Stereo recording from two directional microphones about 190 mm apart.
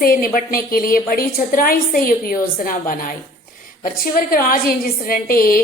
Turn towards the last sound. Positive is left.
turn(degrees=50)  # may be behind; listen again after turning